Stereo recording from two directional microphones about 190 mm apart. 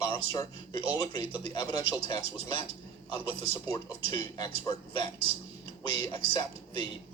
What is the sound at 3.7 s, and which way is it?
Speech, 25° left (ahead or behind).